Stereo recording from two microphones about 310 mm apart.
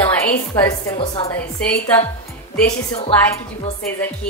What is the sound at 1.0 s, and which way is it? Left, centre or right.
Speech, centre.